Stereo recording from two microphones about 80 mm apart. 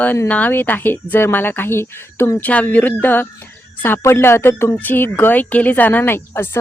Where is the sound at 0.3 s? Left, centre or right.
Centre.